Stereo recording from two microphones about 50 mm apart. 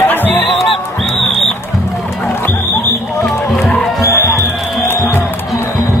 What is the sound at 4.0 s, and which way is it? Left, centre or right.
Music, left.